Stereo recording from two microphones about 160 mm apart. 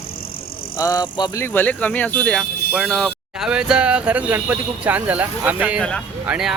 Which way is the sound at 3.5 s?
5° right (ahead or behind).